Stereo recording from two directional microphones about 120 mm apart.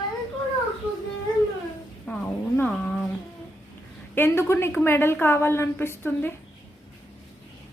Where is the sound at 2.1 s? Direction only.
15° left (ahead or behind).